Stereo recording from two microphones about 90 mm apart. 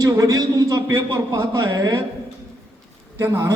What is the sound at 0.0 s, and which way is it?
A man's voice, 45° right (ahead or behind).